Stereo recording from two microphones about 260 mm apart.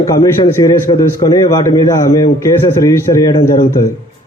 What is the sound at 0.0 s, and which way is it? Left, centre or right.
A man's voice, centre.